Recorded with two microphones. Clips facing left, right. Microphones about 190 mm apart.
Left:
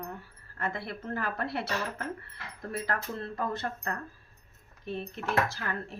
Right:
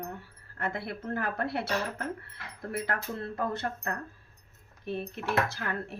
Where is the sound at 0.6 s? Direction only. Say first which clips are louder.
Right 1 dB; 60° right (ahead or behind).